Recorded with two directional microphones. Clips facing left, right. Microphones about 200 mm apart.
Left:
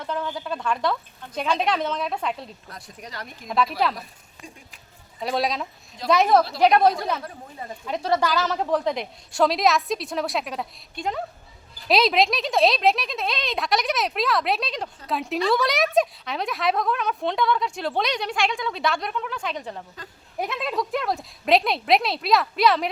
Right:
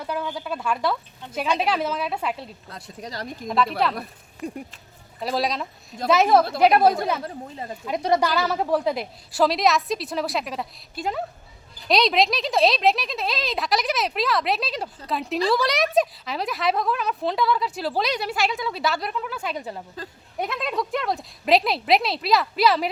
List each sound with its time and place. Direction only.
0.0 s a woman's voice: 10° right (ahead or behind)
2.6 s speech: 25° right (ahead or behind)
3.4 s a woman's voice: centre (ahead or behind)
4.4 s speech: 60° right (ahead or behind)
5.2 s a woman's voice: centre (ahead or behind)
8.0 s a woman's voice: 15° right (ahead or behind)